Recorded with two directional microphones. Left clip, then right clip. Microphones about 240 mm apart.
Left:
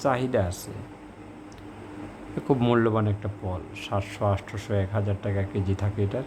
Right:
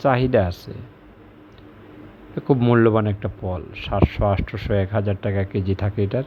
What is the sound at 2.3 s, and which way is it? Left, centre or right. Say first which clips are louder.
Speech: right 5 dB; centre.